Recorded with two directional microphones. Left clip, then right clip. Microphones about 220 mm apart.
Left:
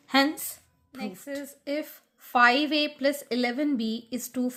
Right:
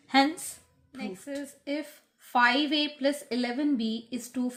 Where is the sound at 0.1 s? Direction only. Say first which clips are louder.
Even; 40° left (ahead or behind).